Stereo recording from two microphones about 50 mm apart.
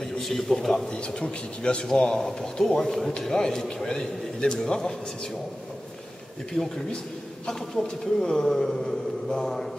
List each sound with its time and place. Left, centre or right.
0.2 s speech: centre
0.9 s a man's voice: centre
6.5 s speech: centre